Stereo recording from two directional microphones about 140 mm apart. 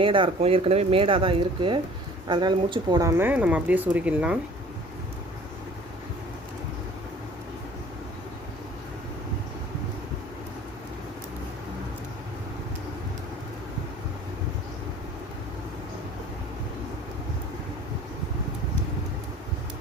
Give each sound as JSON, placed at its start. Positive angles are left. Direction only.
{"t": 0.0, "sound": "speech", "side_deg": -40}
{"t": 3.0, "sound": "speech", "side_deg": -20}